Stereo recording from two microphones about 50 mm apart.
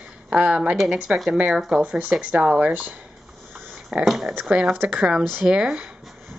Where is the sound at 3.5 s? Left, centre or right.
Right.